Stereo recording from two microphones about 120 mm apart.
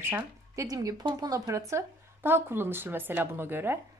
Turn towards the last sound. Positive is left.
turn(degrees=-20)  # may be behind; listen again after turning